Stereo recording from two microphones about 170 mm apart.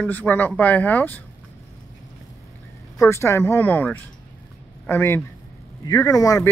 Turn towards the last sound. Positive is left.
turn(degrees=20)  # may be behind; listen again after turning